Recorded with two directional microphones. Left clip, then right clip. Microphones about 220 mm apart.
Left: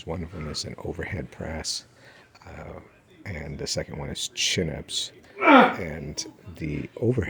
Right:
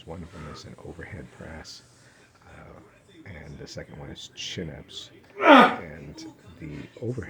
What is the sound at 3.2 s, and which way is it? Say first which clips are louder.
Speech: left 9 dB; 40° left (ahead or behind).